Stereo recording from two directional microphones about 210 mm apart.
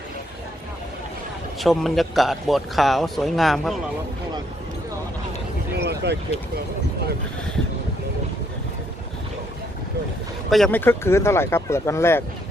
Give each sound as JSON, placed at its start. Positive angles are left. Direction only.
{"t": 1.5, "sound": "a man's voice", "side_deg": 0}
{"t": 5.7, "sound": "a sound", "side_deg": -50}
{"t": 10.5, "sound": "speech", "side_deg": 5}